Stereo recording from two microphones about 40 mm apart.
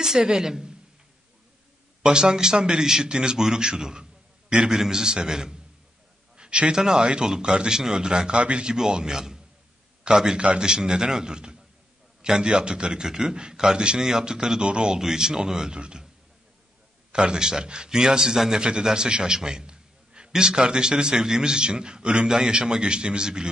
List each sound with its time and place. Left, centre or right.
0.0 s a man's voice: centre
2.0 s a man's voice: centre
6.3 s a sound: right
6.8 s a man's voice: centre
8.7 s a man's voice: centre
17.1 s a man's voice: right